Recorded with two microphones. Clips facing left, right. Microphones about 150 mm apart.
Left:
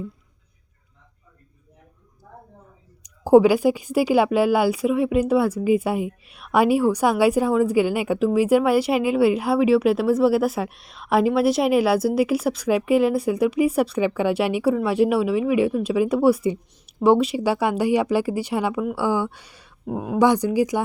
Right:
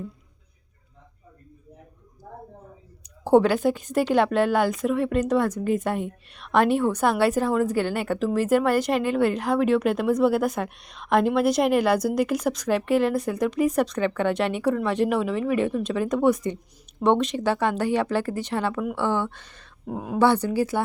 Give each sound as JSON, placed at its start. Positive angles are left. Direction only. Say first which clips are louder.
{"t": 2.3, "sound": "a sound", "louder": "right 3 dB", "side_deg": -45}
{"t": 3.0, "sound": "a woman's voice", "louder": "left 4 dB", "side_deg": 10}
{"t": 20.1, "sound": "a woman's voice", "louder": "left 2 dB", "side_deg": 15}